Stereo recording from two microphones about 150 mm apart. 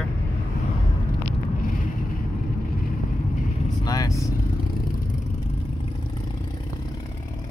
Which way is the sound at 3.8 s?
25° left (ahead or behind).